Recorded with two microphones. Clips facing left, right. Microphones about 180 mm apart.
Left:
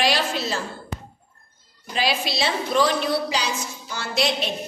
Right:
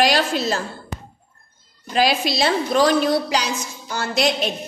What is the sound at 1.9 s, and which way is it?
Speech, 40° right (ahead or behind).